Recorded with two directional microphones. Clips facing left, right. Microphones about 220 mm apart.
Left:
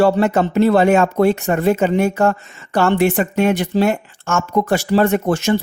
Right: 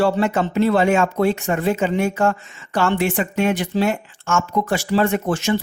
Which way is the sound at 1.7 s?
60° left (ahead or behind).